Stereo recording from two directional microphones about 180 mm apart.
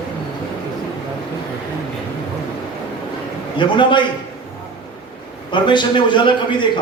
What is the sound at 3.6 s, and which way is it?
Speech, 25° left (ahead or behind).